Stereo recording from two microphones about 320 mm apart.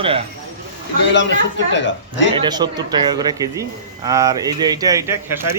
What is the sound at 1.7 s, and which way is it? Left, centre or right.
Speech, left.